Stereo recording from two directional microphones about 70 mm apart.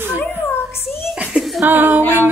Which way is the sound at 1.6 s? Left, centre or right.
Right.